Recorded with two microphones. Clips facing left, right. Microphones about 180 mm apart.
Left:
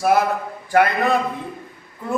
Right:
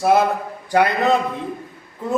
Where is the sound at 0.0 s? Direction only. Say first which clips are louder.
Right 1 dB; 25° right (ahead or behind).